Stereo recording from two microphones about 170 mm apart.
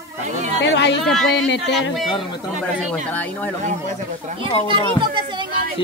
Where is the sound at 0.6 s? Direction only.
90° left.